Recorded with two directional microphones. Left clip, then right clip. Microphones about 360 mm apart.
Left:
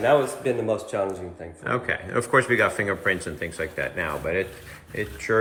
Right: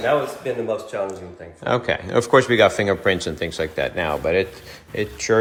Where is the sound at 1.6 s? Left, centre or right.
Centre.